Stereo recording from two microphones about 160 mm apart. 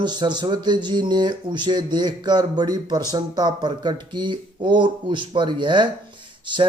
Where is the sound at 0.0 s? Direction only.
30° right (ahead or behind).